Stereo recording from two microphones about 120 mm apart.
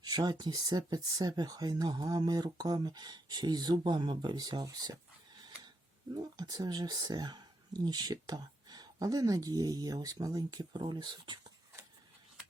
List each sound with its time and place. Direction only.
0.0 s speech: 35° right (ahead or behind)
6.1 s speech: 35° right (ahead or behind)